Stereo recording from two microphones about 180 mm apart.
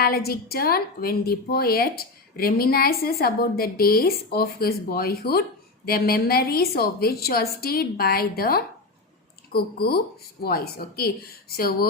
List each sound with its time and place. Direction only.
0.0 s a woman's voice: 55° left (ahead or behind)